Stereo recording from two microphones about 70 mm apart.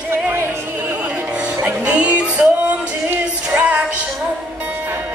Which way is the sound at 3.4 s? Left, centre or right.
Centre.